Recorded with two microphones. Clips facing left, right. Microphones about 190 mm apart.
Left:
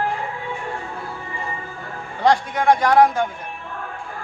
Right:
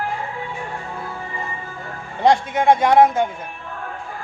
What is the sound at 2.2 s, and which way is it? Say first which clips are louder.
A man's voice: right 2 dB; 25° right (ahead or behind).